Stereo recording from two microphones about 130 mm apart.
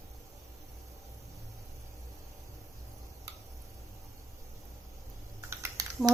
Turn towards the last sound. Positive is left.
turn(degrees=-25)  # may be behind; listen again after turning